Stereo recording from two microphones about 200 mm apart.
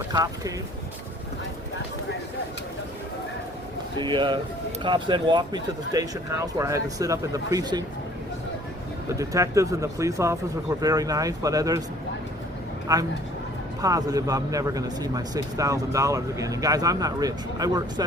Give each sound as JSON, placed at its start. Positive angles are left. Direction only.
{"t": 0.1, "sound": "speech", "side_deg": -20}
{"t": 3.9, "sound": "speech", "side_deg": -25}
{"t": 9.1, "sound": "speech", "side_deg": -15}
{"t": 12.9, "sound": "speech", "side_deg": -20}